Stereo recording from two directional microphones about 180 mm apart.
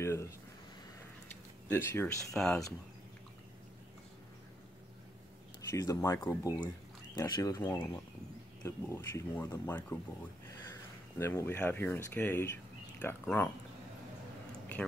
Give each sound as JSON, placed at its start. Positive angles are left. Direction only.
{"t": 0.0, "sound": "speech", "side_deg": 15}
{"t": 1.7, "sound": "speech", "side_deg": 10}
{"t": 2.3, "sound": "speech", "side_deg": 0}
{"t": 5.7, "sound": "speech", "side_deg": 20}
{"t": 11.1, "sound": "speech", "side_deg": 15}
{"t": 14.5, "sound": "a sound", "side_deg": 5}